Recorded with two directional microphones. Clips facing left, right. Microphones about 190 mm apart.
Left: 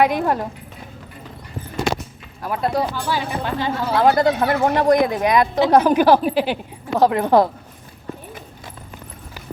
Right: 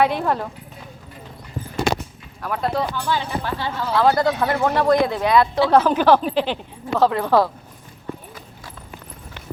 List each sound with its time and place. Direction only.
0.0 s speech: 15° left (ahead or behind)
2.4 s speech: 10° left (ahead or behind)